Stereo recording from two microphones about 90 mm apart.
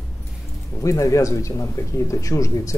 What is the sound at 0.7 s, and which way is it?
Speech, 35° left (ahead or behind).